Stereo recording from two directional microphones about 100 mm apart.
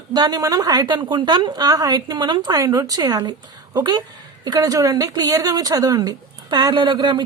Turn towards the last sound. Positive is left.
turn(degrees=-50)  # may be behind; listen again after turning